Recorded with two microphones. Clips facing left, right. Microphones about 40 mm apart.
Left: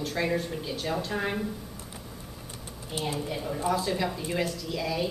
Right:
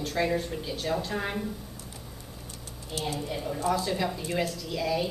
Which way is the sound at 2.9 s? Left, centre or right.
Centre.